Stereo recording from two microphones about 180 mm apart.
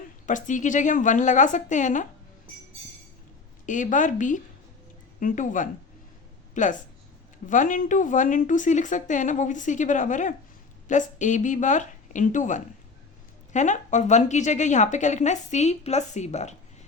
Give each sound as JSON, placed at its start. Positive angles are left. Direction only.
{"t": 0.3, "sound": "speech", "side_deg": 45}
{"t": 3.7, "sound": "a woman's voice", "side_deg": 45}